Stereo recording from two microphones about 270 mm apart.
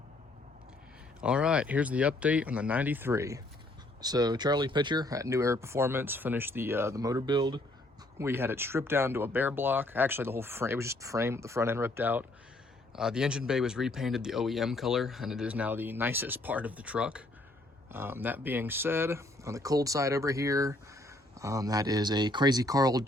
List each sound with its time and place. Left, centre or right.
1.2 s speech: centre